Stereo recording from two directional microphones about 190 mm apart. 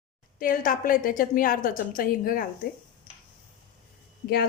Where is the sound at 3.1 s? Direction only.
45° left (ahead or behind).